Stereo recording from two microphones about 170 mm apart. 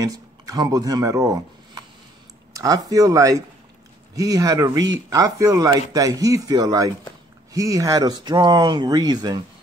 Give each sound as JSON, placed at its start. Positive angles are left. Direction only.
{"t": 0.0, "sound": "speech", "side_deg": -20}